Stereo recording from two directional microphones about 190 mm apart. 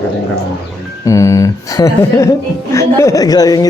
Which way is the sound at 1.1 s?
15° left (ahead or behind).